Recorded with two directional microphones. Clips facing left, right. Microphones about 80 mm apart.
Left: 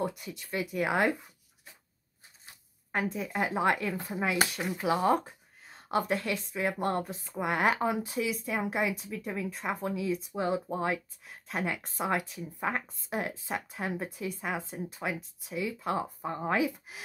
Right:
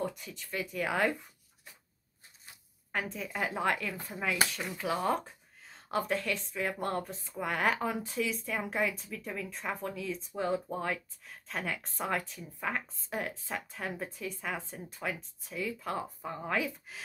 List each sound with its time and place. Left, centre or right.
0.0 s speech: centre
3.1 s speech: centre
9.1 s speech: centre
9.5 s speech: centre
12.5 s speech: left